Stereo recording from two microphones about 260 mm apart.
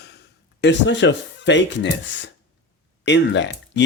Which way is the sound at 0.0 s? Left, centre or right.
Left.